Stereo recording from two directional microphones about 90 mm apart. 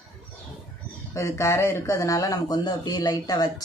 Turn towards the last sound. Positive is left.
turn(degrees=45)  # may be behind; listen again after turning